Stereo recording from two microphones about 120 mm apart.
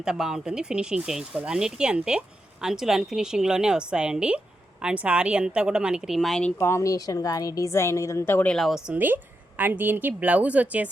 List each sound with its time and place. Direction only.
0.0 s speech: 5° right (ahead or behind)
6.6 s a woman's voice: 25° left (ahead or behind)
8.5 s speech: centre (ahead or behind)
8.9 s speech: 15° right (ahead or behind)